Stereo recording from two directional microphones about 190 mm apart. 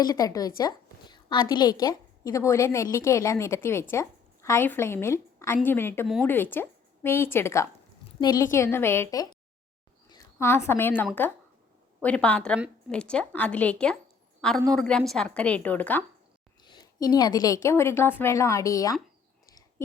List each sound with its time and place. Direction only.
0.0 s a woman's voice: 20° left (ahead or behind)
16.6 s a woman's voice: 20° left (ahead or behind)